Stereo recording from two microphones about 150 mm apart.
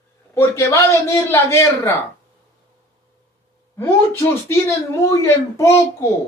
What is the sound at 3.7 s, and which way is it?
A man's voice, 20° left (ahead or behind).